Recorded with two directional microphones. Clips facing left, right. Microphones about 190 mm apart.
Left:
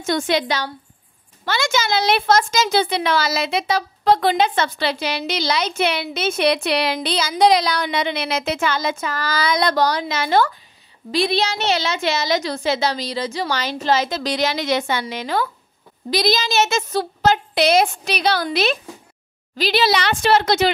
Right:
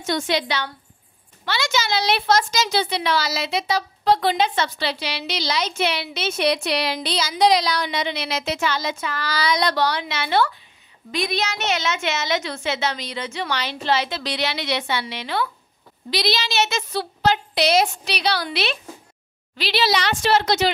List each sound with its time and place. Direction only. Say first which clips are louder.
0.0 s a woman's voice: left 3 dB; 50° left (ahead or behind)
11.1 s a woman's voice: left 5 dB; 30° left (ahead or behind); by 20.7 s 55° left (ahead or behind)